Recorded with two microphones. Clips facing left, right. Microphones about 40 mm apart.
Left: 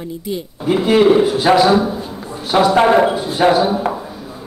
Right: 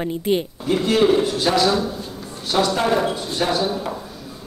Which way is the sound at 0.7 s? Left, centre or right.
Centre.